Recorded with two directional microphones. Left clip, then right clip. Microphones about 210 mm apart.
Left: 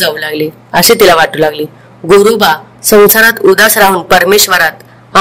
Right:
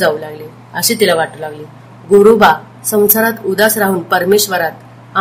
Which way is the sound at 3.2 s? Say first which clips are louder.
Left 8 dB; 50° left (ahead or behind).